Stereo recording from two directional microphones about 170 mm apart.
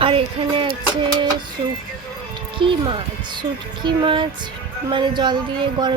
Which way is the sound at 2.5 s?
30° right (ahead or behind).